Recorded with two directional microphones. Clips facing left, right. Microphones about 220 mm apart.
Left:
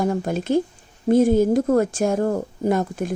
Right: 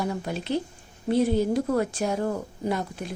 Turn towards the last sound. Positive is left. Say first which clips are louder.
# left 7 dB
turn(degrees=50)  # may be behind; listen again after turning